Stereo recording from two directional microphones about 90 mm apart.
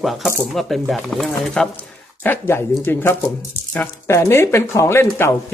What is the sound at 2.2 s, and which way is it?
Speech, 25° left (ahead or behind).